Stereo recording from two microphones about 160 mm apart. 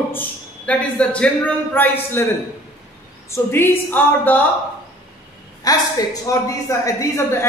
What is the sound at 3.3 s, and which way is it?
A woman's voice, 15° left (ahead or behind).